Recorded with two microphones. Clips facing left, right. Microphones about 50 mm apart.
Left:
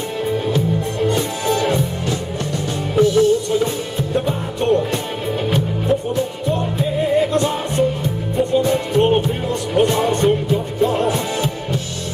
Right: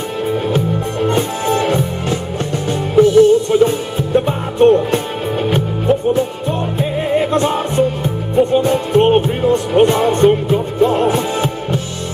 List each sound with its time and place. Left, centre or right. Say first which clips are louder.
1.0 s music: right 3 dB; right